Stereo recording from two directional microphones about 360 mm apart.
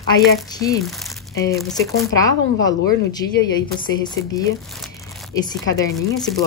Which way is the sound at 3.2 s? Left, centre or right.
Left.